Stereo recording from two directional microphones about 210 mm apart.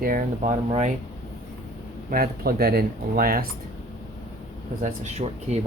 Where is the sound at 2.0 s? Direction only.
45° right (ahead or behind).